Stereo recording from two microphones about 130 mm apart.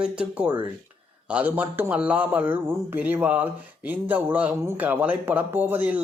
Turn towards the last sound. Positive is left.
turn(degrees=-15)  # may be behind; listen again after turning